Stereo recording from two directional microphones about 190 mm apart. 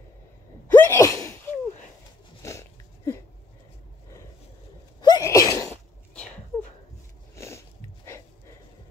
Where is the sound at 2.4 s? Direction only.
15° left (ahead or behind).